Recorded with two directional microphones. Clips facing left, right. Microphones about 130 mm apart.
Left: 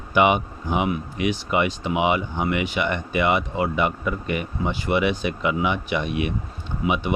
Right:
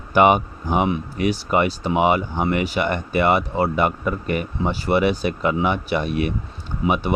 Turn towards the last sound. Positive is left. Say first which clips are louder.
# right 2 dB
turn(degrees=-40)  # may be behind; listen again after turning